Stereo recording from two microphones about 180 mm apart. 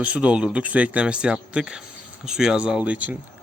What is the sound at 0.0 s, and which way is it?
Speech, 5° right (ahead or behind).